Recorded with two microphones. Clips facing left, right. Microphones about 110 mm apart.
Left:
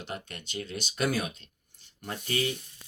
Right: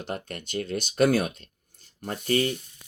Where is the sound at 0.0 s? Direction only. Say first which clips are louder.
Right 5 dB; 45° right (ahead or behind).